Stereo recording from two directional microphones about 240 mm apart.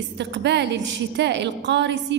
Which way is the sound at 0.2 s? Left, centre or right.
Right.